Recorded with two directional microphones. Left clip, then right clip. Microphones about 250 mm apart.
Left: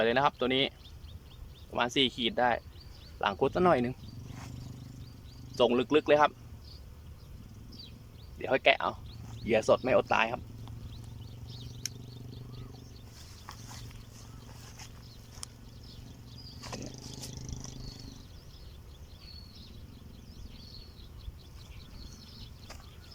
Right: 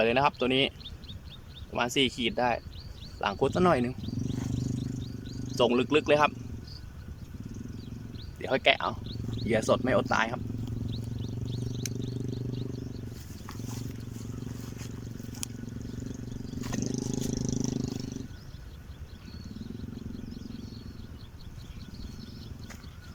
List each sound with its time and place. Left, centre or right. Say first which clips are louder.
0.0 s speech: right 2 dB; centre
1.7 s speech: right 1 dB; centre
4.5 s cricket: right 14 dB; right
5.5 s speech: right 1 dB; centre
8.4 s speech: right 1 dB; centre
11.8 s wild animals: right 1 dB; left
13.5 s wild animals: right 6 dB; centre
15.4 s wild animals: right 7 dB; centre
16.8 s a sound: right 11 dB; right